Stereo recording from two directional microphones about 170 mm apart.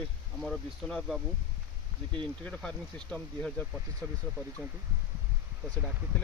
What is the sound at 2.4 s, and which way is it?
Speech, 5° left (ahead or behind).